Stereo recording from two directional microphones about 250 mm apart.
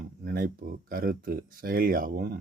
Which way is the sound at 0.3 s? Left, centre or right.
Right.